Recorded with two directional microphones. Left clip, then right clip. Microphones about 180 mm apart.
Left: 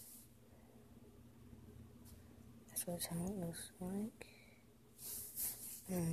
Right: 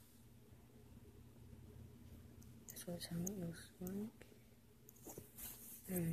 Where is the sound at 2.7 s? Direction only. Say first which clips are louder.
Left 4 dB; 15° left (ahead or behind).